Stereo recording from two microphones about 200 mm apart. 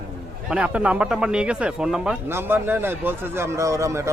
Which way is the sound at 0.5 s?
5° right (ahead or behind).